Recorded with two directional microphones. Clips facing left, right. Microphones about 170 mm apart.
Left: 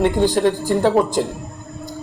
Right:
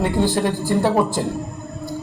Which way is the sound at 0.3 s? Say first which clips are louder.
Left 3 dB; 15° left (ahead or behind).